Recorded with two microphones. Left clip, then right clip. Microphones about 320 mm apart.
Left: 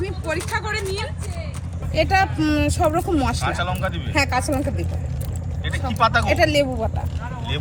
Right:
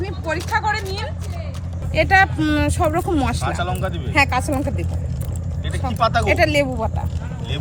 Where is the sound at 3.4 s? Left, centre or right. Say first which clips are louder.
Even; centre.